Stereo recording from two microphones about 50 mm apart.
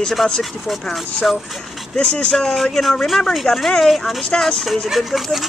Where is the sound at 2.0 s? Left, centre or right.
Left.